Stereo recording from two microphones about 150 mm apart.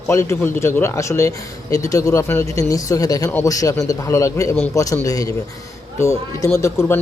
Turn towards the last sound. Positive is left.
turn(degrees=15)  # may be behind; listen again after turning